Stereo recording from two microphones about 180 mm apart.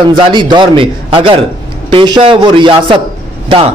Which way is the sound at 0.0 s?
25° right (ahead or behind).